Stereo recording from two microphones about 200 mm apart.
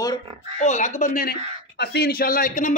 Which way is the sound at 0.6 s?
35° left (ahead or behind).